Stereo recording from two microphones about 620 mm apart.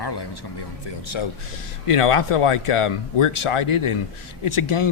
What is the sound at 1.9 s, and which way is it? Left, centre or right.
Speech, left.